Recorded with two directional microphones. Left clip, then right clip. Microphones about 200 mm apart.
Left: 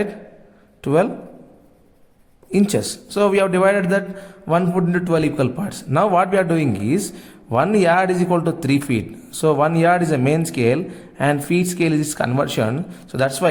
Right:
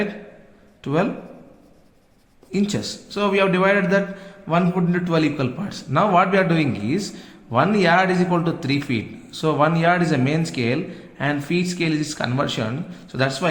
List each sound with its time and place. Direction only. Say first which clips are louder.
0.8 s a man's voice: left 6 dB; 50° left (ahead or behind)
2.5 s a man's voice: left 5 dB; 50° left (ahead or behind)